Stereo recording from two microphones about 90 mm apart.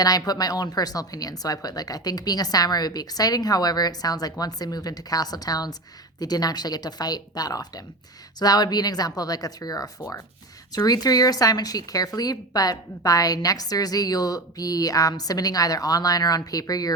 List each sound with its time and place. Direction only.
0.0 s a woman's voice: 45° left (ahead or behind)